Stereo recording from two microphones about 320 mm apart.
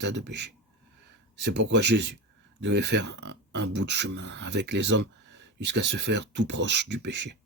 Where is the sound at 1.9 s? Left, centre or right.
Right.